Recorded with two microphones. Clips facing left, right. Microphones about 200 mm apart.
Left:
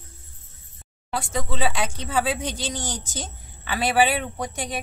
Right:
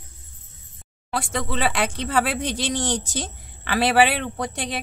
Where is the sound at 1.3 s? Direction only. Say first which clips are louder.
Right 2 dB; 75° right (ahead or behind).